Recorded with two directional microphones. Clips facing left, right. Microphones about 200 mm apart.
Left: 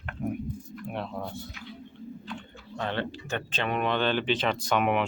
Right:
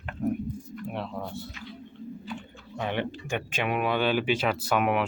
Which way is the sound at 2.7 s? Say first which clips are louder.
Right 1 dB; 15° right (ahead or behind).